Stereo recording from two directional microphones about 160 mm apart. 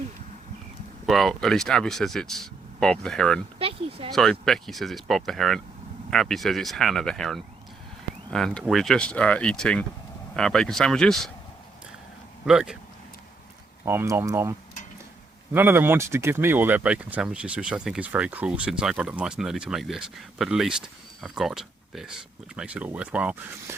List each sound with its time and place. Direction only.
1.0 s speech: centre (ahead or behind)
3.6 s a sound: 35° right (ahead or behind)
4.1 s speech: centre (ahead or behind)
12.5 s speech: 5° right (ahead or behind)
13.8 s speech: 15° right (ahead or behind)
15.5 s speech: 15° right (ahead or behind)